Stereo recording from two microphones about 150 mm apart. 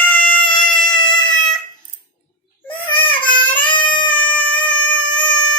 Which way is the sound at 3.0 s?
10° left (ahead or behind).